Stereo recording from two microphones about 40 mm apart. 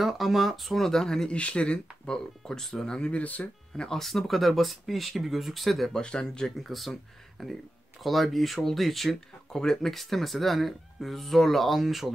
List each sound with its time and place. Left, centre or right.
0.0 s speech: centre
1.3 s speech: left
2.0 s speech: centre
3.1 s speech: left
3.7 s speech: centre
4.0 s speech: centre
5.9 s speech: centre
6.6 s speech: centre
9.5 s speech: centre